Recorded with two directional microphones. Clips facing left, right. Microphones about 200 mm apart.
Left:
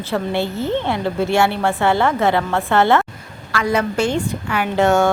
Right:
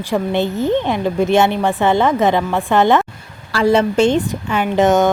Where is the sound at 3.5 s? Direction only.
30° right (ahead or behind).